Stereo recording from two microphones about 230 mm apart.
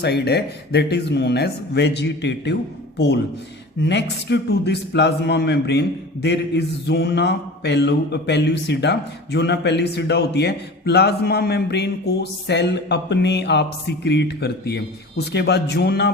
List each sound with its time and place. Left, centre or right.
0.0 s mantra: left
3.8 s mantra: left